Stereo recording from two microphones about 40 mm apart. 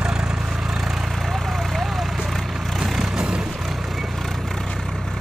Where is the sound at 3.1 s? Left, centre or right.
Centre.